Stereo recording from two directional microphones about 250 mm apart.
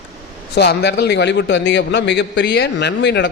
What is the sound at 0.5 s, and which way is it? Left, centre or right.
Speech, left.